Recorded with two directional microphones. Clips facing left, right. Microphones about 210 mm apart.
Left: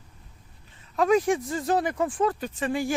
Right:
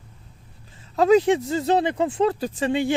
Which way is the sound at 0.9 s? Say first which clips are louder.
Right 5 dB; 25° right (ahead or behind).